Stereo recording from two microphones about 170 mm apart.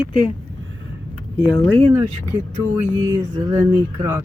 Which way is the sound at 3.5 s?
20° right (ahead or behind).